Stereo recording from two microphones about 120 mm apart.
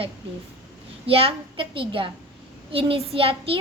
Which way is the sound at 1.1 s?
50° right (ahead or behind).